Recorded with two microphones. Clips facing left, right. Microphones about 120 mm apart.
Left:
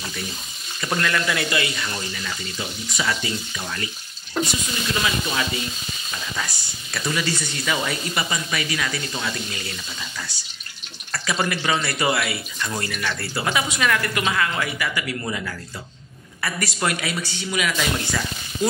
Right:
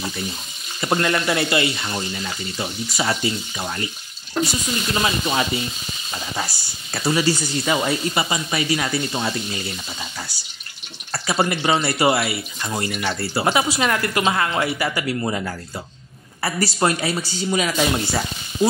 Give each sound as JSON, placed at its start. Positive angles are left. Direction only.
{"t": 0.7, "sound": "speech", "side_deg": -30}
{"t": 5.0, "sound": "speech", "side_deg": -30}
{"t": 11.2, "sound": "speech", "side_deg": -30}